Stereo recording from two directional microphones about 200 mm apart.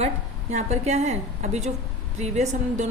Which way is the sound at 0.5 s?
35° right (ahead or behind).